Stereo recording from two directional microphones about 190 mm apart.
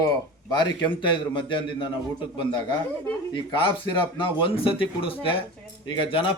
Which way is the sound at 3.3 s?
25° left (ahead or behind).